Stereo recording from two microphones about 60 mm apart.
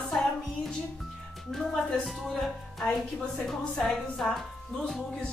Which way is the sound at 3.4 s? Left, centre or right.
Centre.